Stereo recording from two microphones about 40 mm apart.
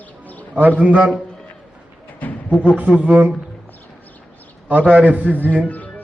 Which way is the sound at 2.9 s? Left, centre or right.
Right.